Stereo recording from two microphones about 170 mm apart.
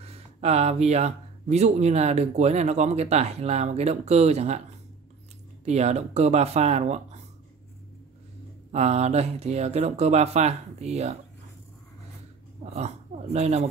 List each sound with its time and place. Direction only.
0.0 s speech: 40° right (ahead or behind)
5.7 s speech: 40° right (ahead or behind)
8.7 s speech: 40° right (ahead or behind)
12.7 s speech: 40° right (ahead or behind)